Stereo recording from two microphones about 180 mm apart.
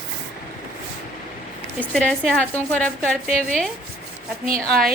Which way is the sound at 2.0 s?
5° left (ahead or behind).